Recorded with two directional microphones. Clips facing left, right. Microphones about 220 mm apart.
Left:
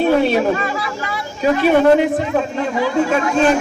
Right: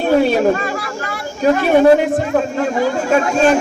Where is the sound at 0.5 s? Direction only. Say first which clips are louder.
Right 1 dB; 45° right (ahead or behind).